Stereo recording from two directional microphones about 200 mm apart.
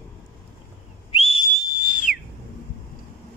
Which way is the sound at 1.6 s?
5° right (ahead or behind).